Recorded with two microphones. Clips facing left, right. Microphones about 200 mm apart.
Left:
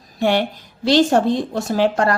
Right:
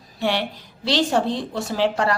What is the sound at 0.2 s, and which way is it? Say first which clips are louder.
A woman's voice: left 5 dB; 50° left (ahead or behind).